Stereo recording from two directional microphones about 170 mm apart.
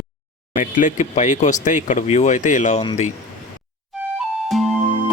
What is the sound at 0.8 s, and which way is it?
Speech, 50° left (ahead or behind).